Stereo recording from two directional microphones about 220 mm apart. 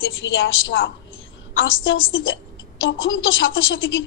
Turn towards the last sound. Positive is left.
turn(degrees=60)  # may be behind; listen again after turning